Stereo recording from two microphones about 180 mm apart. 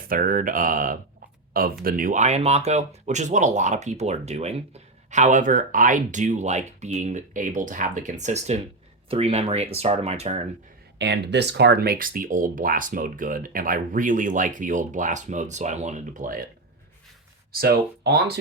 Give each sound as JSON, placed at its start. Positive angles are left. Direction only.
{"t": 0.1, "sound": "speech", "side_deg": -50}
{"t": 10.9, "sound": "speech", "side_deg": -70}
{"t": 17.5, "sound": "speech", "side_deg": -60}